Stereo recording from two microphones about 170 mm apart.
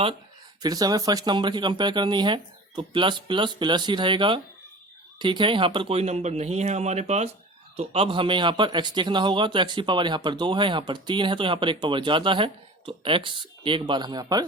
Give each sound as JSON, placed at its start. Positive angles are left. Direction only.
{"t": 0.6, "sound": "speech", "side_deg": -20}